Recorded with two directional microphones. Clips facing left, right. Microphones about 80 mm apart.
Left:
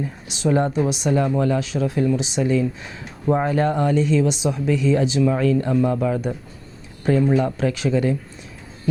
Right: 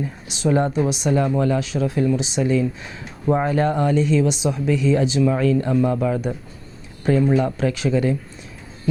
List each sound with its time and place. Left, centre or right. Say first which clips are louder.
0.4 s speech: even; centre